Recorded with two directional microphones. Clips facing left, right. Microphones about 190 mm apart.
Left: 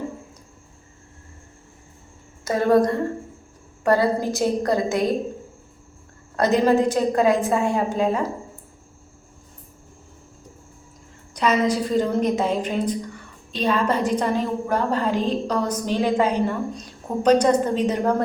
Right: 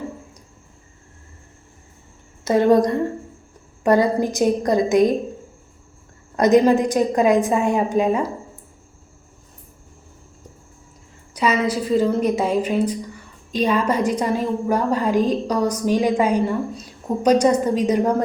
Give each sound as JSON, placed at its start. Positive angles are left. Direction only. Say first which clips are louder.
{"t": 2.4, "sound": "a woman's voice", "louder": "right 3 dB", "side_deg": -20}
{"t": 6.3, "sound": "a woman's voice", "louder": "right 3 dB", "side_deg": -15}
{"t": 11.3, "sound": "a woman's voice", "louder": "even", "side_deg": -5}